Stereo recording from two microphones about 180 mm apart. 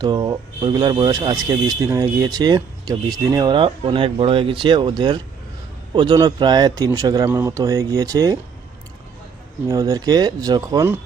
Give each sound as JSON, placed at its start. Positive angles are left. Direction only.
{"t": 0.0, "sound": "speech", "side_deg": -20}
{"t": 9.6, "sound": "speech", "side_deg": -20}